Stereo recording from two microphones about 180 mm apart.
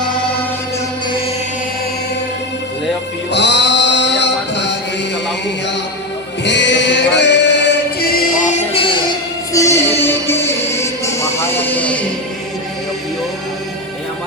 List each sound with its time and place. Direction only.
3.3 s music: 75° left (ahead or behind)
6.4 s music: 80° left; by 9.0 s 30° left (ahead or behind)
9.5 s music: 15° left (ahead or behind)